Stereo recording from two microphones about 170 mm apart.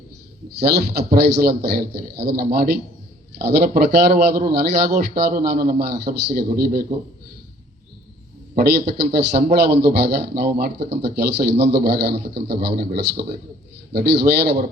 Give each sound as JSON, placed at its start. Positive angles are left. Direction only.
{"t": 0.8, "sound": "a man's voice", "side_deg": -70}
{"t": 8.5, "sound": "a man's voice", "side_deg": -70}